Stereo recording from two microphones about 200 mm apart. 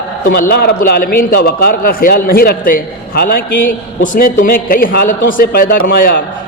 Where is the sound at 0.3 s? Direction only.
55° left (ahead or behind).